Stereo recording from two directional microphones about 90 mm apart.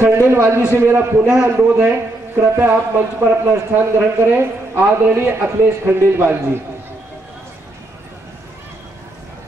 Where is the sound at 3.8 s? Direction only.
20° right (ahead or behind).